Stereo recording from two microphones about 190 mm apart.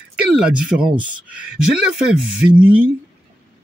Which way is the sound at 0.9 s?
25° right (ahead or behind).